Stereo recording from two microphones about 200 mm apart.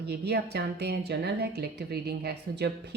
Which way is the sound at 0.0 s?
55° right (ahead or behind).